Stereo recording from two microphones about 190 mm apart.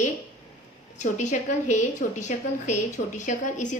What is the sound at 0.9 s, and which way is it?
A woman's voice, 40° left (ahead or behind).